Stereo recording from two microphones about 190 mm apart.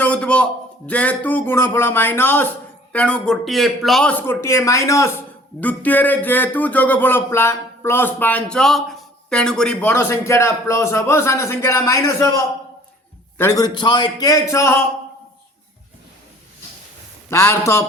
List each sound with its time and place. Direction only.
0.0 s a sound: 5° left (ahead or behind)
0.9 s speech: 5° left (ahead or behind)
13.4 s speech: 15° left (ahead or behind)
17.2 s speech: 15° left (ahead or behind)